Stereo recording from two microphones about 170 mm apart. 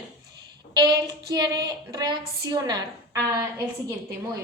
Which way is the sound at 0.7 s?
25° right (ahead or behind).